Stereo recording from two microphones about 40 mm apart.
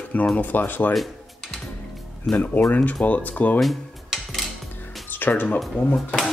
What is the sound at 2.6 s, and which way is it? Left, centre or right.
Speech, left.